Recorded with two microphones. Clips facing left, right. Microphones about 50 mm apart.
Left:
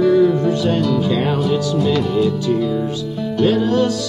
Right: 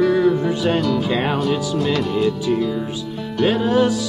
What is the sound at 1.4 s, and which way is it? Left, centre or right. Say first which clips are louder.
Speech: left 2 dB; centre.